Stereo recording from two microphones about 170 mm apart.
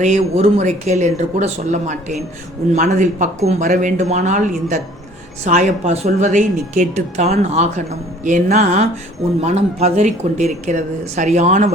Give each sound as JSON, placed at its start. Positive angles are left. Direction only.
{"t": 0.0, "sound": "speech", "side_deg": -40}